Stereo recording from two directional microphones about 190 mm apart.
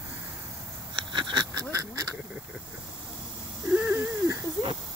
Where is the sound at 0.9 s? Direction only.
25° right (ahead or behind).